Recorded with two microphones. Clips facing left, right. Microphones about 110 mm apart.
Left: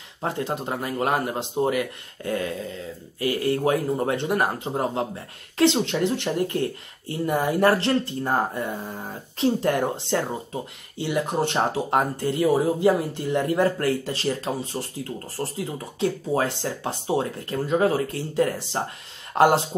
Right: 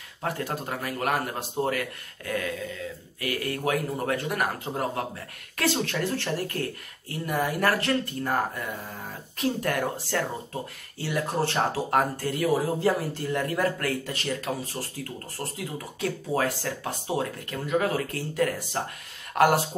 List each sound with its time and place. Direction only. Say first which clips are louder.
0.2 s speech: left 3 dB; 25° left (ahead or behind)
2.2 s speech: left 3 dB; 30° left (ahead or behind)